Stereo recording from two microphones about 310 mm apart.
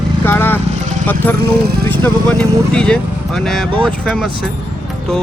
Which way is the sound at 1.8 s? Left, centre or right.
Centre.